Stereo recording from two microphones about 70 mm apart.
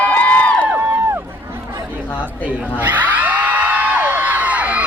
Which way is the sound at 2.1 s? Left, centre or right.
Left.